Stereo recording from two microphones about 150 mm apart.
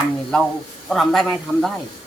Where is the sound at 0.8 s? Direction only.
Centre (ahead or behind).